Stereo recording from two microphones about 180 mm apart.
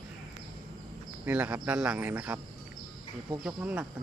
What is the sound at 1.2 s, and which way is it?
Speech, 10° right (ahead or behind).